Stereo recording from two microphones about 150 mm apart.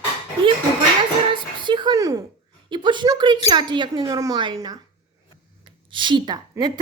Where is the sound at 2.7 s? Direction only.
30° right (ahead or behind).